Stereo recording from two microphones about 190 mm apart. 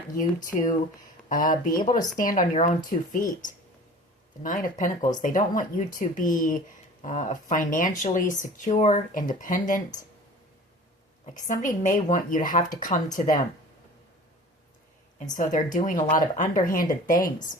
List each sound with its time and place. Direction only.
0.2 s speech: 40° left (ahead or behind)
11.3 s speech: 40° left (ahead or behind)
15.3 s speech: 40° left (ahead or behind)